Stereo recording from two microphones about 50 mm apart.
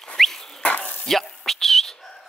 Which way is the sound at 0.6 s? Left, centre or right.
Left.